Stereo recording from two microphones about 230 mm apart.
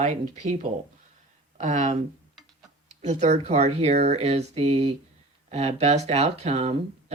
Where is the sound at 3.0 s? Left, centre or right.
Right.